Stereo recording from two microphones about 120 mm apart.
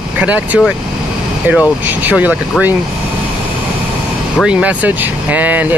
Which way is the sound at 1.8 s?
15° right (ahead or behind).